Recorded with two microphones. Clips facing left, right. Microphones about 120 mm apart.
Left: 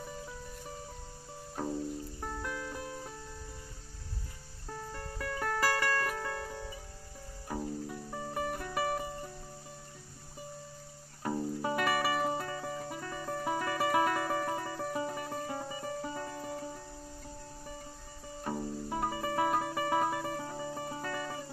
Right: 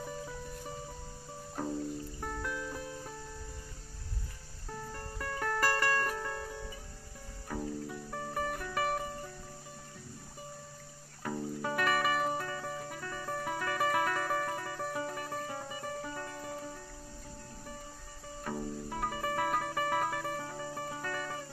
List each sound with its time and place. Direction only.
1.5 s music: 5° left (ahead or behind)
5.2 s music: 10° left (ahead or behind)
7.4 s music: 15° left (ahead or behind)
11.2 s music: 20° left (ahead or behind)
18.4 s music: 15° left (ahead or behind)